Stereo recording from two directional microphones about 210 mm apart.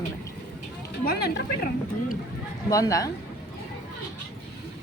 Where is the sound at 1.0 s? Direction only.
45° left (ahead or behind).